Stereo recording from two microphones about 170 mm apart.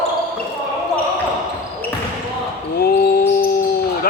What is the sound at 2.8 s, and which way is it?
Basketball bounce, 65° left (ahead or behind).